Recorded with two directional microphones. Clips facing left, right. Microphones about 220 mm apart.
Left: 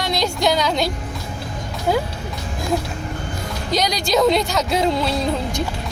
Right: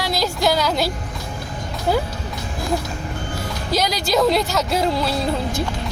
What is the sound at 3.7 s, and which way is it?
A woman's voice, 5° right (ahead or behind).